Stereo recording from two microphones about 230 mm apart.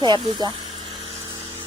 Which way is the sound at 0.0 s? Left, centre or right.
Centre.